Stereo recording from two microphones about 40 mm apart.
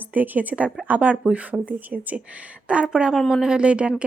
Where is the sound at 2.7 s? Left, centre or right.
Right.